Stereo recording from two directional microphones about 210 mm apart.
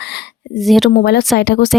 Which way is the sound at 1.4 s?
50° left (ahead or behind).